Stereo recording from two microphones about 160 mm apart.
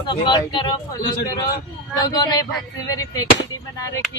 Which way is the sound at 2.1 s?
25° left (ahead or behind).